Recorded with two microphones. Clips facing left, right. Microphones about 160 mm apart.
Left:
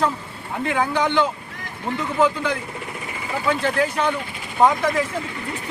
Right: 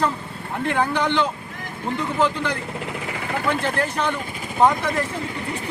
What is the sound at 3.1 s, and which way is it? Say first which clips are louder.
Vehicle: right 3 dB; 65° right (ahead or behind).